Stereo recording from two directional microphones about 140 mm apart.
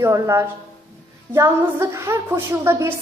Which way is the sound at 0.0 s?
20° right (ahead or behind).